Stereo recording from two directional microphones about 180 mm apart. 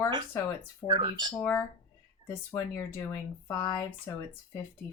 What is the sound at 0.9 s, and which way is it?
Speech, 25° right (ahead or behind).